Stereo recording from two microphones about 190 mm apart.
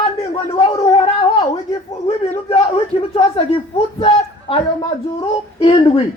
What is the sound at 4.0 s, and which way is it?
Speech, 30° left (ahead or behind).